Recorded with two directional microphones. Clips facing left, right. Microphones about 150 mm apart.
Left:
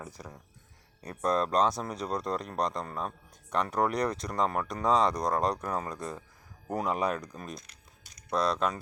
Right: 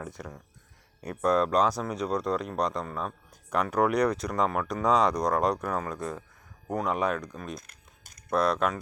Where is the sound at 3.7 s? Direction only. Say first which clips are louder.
Right 6 dB; 30° left (ahead or behind).